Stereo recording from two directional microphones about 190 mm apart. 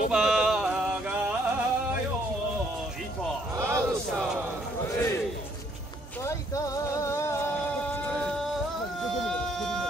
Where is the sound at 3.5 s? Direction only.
15° right (ahead or behind).